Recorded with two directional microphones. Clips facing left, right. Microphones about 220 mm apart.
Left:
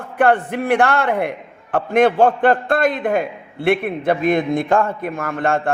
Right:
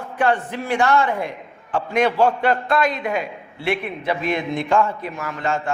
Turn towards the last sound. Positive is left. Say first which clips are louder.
# left 5 dB
turn(degrees=55)  # may be behind; listen again after turning